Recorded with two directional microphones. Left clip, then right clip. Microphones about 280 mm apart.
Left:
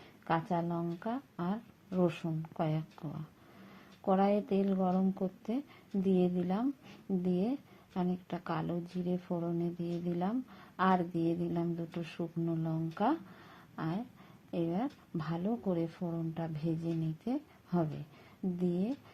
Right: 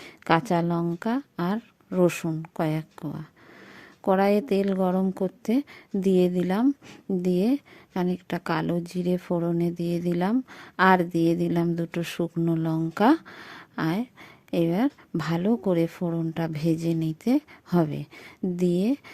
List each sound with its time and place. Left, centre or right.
0.3 s speech: right